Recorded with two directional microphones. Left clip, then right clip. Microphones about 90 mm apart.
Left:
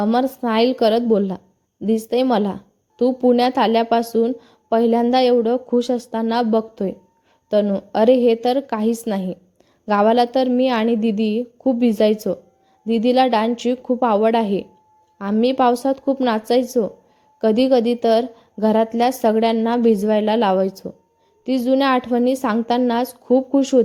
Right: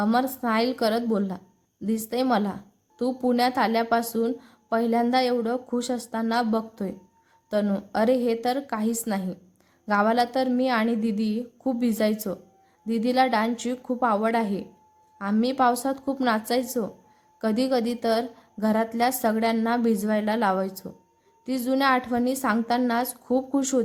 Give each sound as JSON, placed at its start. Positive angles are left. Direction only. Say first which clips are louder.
{"t": 0.0, "sound": "a woman's voice", "louder": "left 5 dB", "side_deg": 30}